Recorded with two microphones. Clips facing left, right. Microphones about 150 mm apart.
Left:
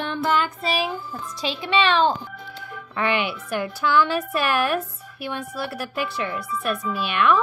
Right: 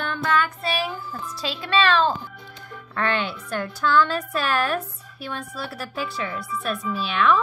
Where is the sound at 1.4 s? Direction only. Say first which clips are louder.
Left 1 dB; 15° left (ahead or behind).